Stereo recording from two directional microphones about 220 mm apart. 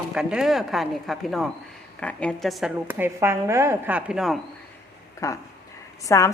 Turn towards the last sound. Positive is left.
turn(degrees=15)  # may be behind; listen again after turning